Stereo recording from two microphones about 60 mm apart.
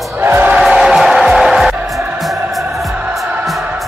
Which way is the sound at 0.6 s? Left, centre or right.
Centre.